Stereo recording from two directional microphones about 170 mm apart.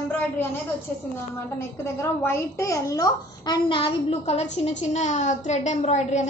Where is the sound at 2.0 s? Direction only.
15° left (ahead or behind).